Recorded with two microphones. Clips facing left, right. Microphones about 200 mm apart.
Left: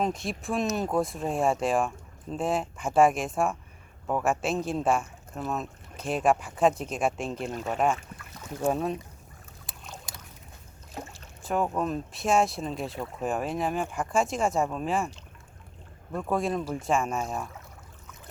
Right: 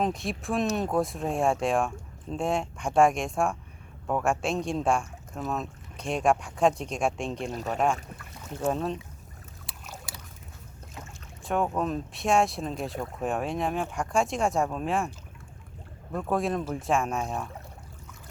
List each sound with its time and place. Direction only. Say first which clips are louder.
0.0 s speech: even; centre (ahead or behind)
7.5 s speech: even; 35° right (ahead or behind)
8.4 s speech: left 1 dB; 10° left (ahead or behind)
9.6 s a sound: even; 5° right (ahead or behind)
11.4 s speech: even; centre (ahead or behind)
16.1 s speech: even; centre (ahead or behind)